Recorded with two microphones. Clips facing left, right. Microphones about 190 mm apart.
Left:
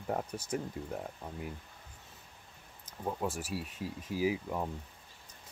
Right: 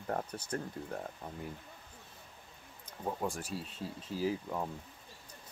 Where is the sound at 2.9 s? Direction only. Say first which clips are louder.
Left 1 dB; 5° left (ahead or behind).